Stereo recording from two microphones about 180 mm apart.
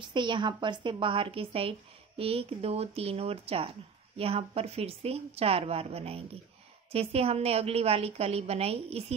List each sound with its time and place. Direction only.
0.0 s a woman's voice: 25° right (ahead or behind)